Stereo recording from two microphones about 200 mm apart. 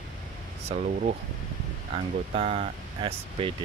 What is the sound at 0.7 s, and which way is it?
Speech, 35° right (ahead or behind).